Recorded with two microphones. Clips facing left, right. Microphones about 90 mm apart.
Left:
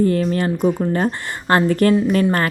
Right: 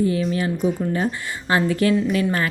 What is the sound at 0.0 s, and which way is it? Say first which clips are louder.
Speech: left 4 dB; 50° left (ahead or behind).